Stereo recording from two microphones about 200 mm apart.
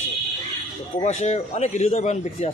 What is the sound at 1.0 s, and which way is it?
Speech, 35° left (ahead or behind).